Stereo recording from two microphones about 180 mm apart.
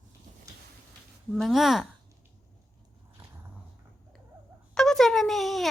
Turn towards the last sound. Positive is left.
turn(degrees=0)  # may be behind; listen again after turning